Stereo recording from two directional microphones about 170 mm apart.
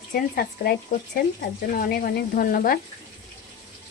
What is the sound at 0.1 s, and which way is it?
Speech, 60° left (ahead or behind).